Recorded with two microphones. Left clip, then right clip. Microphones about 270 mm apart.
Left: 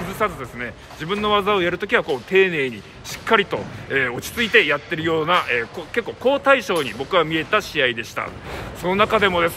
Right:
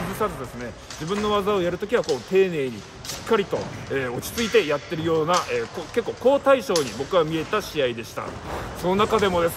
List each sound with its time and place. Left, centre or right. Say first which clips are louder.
0.2 s speech: left 6 dB; centre